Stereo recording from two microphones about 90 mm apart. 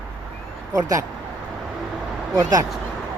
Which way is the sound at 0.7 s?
40° right (ahead or behind).